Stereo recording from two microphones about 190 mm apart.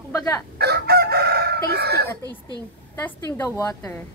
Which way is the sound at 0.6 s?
55° right (ahead or behind).